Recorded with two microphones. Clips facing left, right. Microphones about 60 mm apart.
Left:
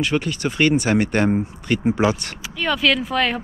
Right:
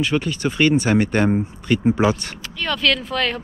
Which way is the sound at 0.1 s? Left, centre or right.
Left.